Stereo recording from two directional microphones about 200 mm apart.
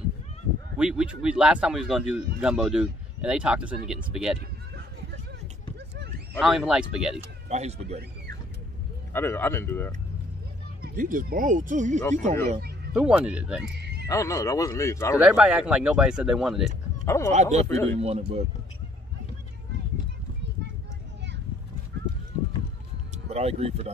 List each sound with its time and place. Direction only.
0.7 s speech: 5° right (ahead or behind)
6.4 s speech: centre (ahead or behind)
7.4 s speech: 35° right (ahead or behind)
9.1 s speech: 10° left (ahead or behind)
10.8 s speech: 45° right (ahead or behind)
12.9 s speech: 5° right (ahead or behind)
13.7 s neigh: 55° right (ahead or behind)
14.0 s speech: 15° left (ahead or behind)
15.1 s speech: 5° right (ahead or behind)
17.0 s speech: 15° left (ahead or behind)
17.3 s speech: 35° right (ahead or behind)
23.2 s speech: 30° right (ahead or behind)